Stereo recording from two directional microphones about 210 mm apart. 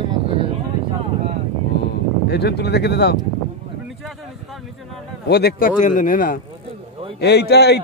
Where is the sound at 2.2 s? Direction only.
50° left (ahead or behind).